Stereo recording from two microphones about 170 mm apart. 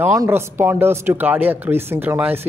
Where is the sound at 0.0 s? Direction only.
15° right (ahead or behind).